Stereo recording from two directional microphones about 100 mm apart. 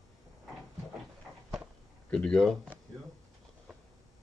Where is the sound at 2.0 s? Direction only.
10° left (ahead or behind).